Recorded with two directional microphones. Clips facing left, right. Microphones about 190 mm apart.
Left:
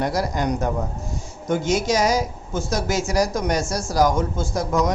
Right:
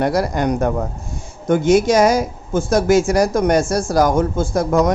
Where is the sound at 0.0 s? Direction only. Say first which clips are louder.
Right 5 dB; 60° right (ahead or behind).